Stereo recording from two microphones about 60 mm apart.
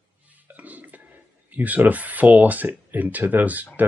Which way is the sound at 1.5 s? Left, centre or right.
Right.